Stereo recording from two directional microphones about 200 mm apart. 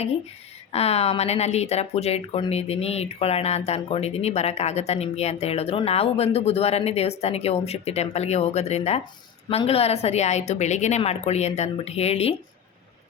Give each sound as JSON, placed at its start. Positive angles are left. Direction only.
{"t": 0.7, "sound": "a woman's voice", "side_deg": 30}